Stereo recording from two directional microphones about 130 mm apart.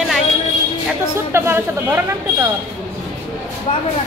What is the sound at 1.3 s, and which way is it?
Speech, 20° right (ahead or behind).